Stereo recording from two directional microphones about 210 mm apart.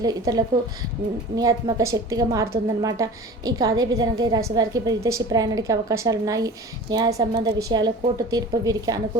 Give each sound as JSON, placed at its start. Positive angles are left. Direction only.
{"t": 0.0, "sound": "a woman's voice", "side_deg": -20}